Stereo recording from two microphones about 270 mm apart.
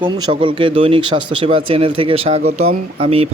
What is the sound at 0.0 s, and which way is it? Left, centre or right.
Speech, centre.